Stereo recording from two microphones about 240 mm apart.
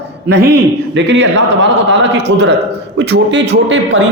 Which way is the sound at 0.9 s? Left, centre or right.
Right.